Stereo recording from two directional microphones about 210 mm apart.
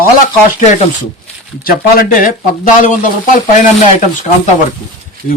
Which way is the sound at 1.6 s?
40° left (ahead or behind).